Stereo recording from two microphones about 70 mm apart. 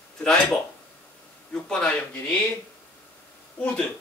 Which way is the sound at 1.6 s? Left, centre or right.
Centre.